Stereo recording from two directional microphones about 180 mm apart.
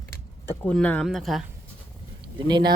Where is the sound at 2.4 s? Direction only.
25° right (ahead or behind).